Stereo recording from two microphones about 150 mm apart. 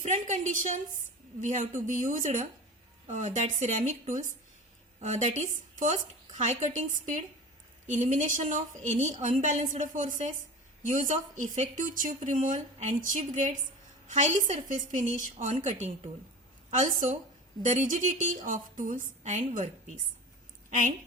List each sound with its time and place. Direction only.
0.0 s a woman's voice: 55° right (ahead or behind)